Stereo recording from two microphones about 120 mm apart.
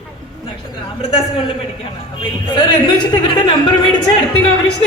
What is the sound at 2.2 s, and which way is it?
A woman's voice, 40° left (ahead or behind).